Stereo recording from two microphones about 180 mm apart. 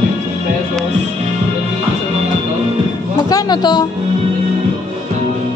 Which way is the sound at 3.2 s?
20° left (ahead or behind).